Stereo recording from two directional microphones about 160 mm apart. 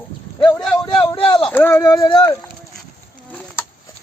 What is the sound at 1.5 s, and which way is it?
Speech, 10° left (ahead or behind).